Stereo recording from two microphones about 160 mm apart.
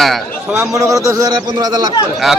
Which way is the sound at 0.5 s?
15° right (ahead or behind).